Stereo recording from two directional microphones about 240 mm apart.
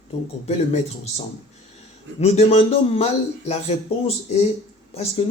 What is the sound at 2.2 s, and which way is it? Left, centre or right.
Speech, left.